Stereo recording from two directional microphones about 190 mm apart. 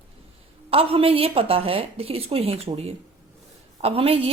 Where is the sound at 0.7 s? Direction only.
30° right (ahead or behind).